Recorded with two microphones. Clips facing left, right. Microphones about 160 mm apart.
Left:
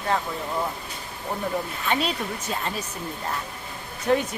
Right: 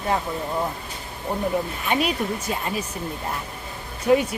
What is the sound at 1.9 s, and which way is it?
Speech, 10° right (ahead or behind).